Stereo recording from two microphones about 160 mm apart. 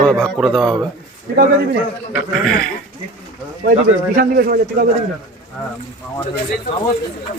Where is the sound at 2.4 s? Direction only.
5° left (ahead or behind).